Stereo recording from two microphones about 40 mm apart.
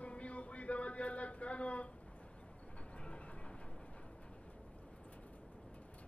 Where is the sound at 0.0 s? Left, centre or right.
Left.